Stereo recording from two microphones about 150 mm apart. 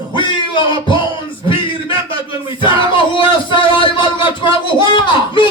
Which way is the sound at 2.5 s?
35° left (ahead or behind).